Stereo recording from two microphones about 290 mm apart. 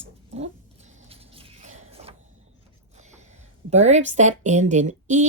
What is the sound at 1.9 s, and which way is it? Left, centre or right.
Printer, centre.